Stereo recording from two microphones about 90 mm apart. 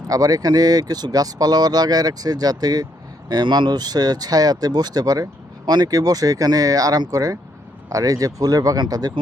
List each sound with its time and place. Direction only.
0.1 s speech: 45° right (ahead or behind)